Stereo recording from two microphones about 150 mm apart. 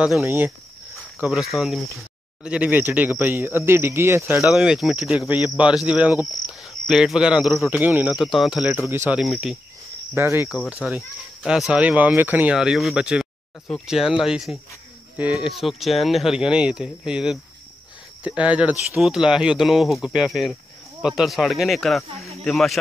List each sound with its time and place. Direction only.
0.2 s speech: 15° right (ahead or behind)
1.1 s speech: 5° right (ahead or behind)
4.5 s speech: centre (ahead or behind)
8.9 s speech: 15° right (ahead or behind)
9.2 s speech: centre (ahead or behind)
10.1 s speech: 15° right (ahead or behind)
10.5 s speech: 5° right (ahead or behind)